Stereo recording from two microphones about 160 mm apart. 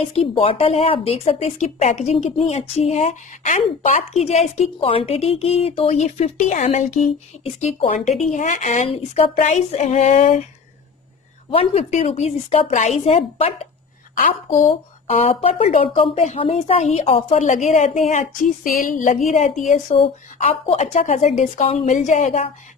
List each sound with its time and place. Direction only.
0.1 s a woman's voice: 35° left (ahead or behind)
11.5 s a woman's voice: 40° left (ahead or behind)
14.1 s a woman's voice: 55° left (ahead or behind)
15.0 s a woman's voice: 40° left (ahead or behind)